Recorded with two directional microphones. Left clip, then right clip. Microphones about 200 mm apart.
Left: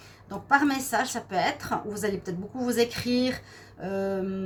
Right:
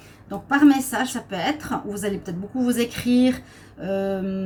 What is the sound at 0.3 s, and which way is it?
A woman's voice, 40° left (ahead or behind).